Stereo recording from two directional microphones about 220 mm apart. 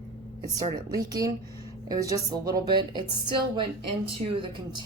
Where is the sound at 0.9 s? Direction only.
15° right (ahead or behind).